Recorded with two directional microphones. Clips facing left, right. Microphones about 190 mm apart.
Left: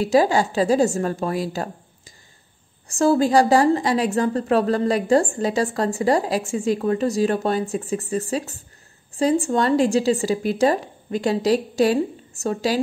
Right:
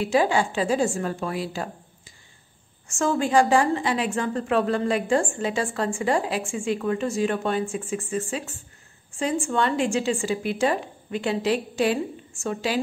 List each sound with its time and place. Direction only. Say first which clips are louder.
0.0 s a woman's voice: left 4 dB; 40° left (ahead or behind)